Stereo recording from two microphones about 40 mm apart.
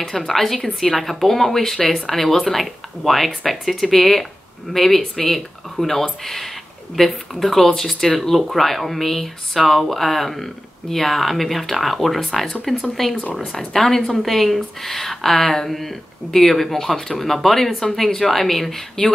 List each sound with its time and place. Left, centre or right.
0.3 s speech: centre
1.8 s speech: centre
2.0 s speech: centre